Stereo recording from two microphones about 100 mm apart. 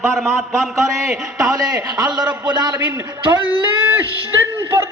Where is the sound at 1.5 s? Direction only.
35° right (ahead or behind).